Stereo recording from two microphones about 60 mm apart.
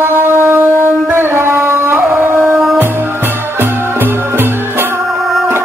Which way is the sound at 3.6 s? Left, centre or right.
Right.